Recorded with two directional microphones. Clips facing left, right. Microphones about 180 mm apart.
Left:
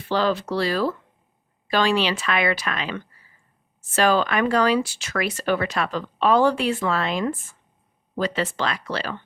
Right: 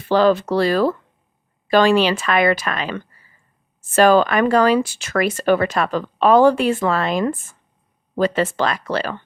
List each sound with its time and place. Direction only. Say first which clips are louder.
0.1 s speech: right 7 dB; 50° right (ahead or behind)